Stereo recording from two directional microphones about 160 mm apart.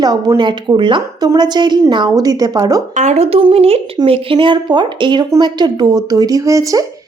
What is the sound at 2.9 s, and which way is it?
A woman's voice, 45° right (ahead or behind).